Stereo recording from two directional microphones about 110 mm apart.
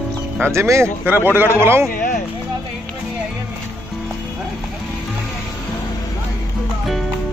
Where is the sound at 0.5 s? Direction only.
25° right (ahead or behind).